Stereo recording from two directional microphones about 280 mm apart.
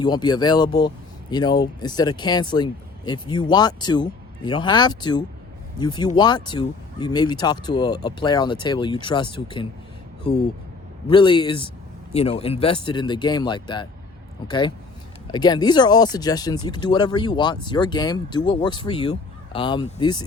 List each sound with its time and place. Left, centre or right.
0.0 s speech: centre
11.1 s speech: centre
15.3 s speech: centre